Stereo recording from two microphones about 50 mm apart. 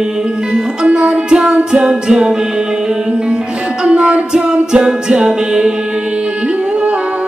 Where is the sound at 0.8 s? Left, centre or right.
Right.